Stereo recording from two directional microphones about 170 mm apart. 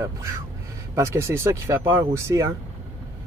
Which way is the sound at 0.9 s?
15° right (ahead or behind).